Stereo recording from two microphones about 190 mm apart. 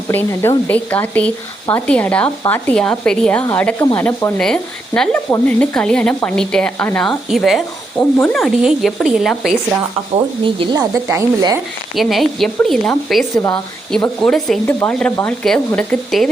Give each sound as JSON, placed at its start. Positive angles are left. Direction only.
{"t": 0.1, "sound": "a woman's voice", "side_deg": 10}
{"t": 10.4, "sound": "a woman's voice", "side_deg": -25}
{"t": 11.9, "sound": "a woman's voice", "side_deg": 0}